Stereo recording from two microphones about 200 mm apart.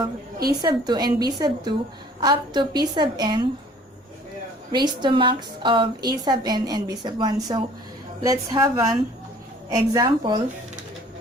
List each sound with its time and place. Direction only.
0.6 s a woman's voice: 20° right (ahead or behind)
4.7 s a woman's voice: 20° right (ahead or behind)